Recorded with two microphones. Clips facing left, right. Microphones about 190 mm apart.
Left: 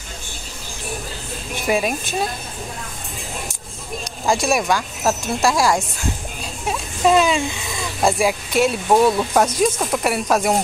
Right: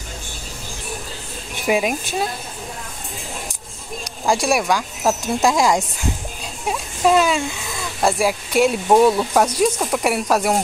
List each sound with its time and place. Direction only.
1.7 s speech: 15° right (ahead or behind)
4.0 s speech: 10° right (ahead or behind)
6.7 s speech: 5° right (ahead or behind)